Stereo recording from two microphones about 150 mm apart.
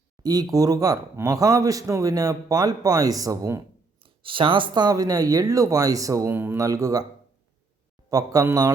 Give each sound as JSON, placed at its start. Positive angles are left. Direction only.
{"t": 0.2, "sound": "speech", "side_deg": -25}
{"t": 4.0, "sound": "speech", "side_deg": -35}
{"t": 8.1, "sound": "speech", "side_deg": -25}